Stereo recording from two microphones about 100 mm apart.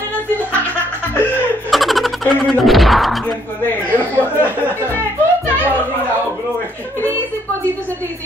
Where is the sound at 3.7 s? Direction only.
20° left (ahead or behind).